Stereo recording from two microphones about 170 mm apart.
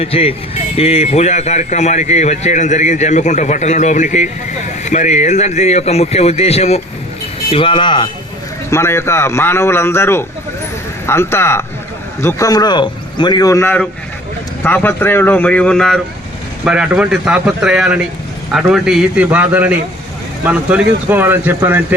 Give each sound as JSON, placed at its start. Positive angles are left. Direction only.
{"t": 0.0, "sound": "a man's voice", "side_deg": 35}
{"t": 8.7, "sound": "a man's voice", "side_deg": 15}